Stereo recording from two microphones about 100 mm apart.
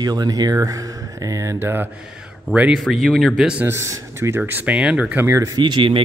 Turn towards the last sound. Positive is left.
turn(degrees=-55)  # may be behind; listen again after turning